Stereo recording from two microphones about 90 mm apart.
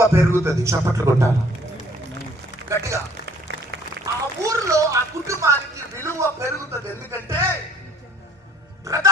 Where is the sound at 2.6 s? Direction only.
35° right (ahead or behind).